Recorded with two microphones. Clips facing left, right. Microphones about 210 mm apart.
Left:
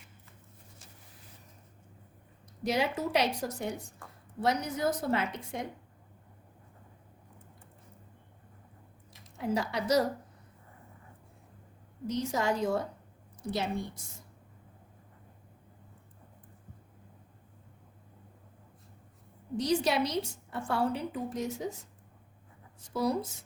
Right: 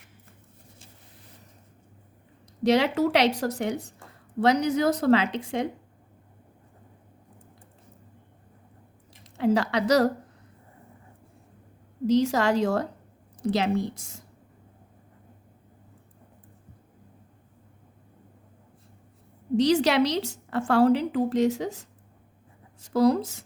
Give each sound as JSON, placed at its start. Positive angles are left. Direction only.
{"t": 2.6, "sound": "a woman's voice", "side_deg": -80}
{"t": 9.2, "sound": "a woman's voice", "side_deg": -85}
{"t": 12.0, "sound": "a woman's voice", "side_deg": -85}
{"t": 19.5, "sound": "a woman's voice", "side_deg": -85}